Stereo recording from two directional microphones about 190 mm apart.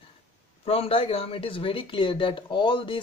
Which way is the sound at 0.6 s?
30° left (ahead or behind).